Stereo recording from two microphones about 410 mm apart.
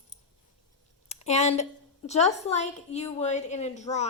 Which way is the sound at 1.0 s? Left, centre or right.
Centre.